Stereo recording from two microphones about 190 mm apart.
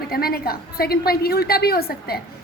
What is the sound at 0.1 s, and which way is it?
A woman's voice, 55° left (ahead or behind).